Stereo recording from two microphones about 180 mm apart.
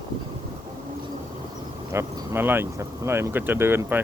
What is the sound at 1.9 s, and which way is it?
Speech, 15° right (ahead or behind).